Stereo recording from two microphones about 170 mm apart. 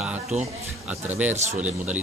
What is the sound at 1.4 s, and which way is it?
Speech, 45° right (ahead or behind).